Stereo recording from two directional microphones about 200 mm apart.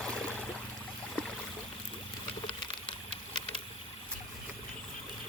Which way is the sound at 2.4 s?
25° left (ahead or behind).